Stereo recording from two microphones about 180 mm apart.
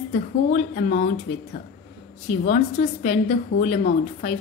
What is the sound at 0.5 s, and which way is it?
Speech, 45° left (ahead or behind).